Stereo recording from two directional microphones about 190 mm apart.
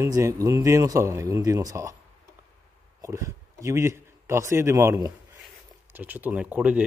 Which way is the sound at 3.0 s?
15° right (ahead or behind).